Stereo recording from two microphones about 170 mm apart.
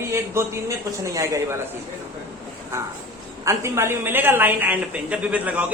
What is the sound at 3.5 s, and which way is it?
A man's voice, 15° right (ahead or behind).